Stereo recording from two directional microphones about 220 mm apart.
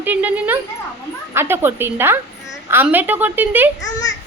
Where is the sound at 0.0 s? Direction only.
10° right (ahead or behind).